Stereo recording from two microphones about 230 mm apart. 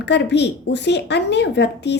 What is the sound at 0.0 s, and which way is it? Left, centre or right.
A woman's voice, left.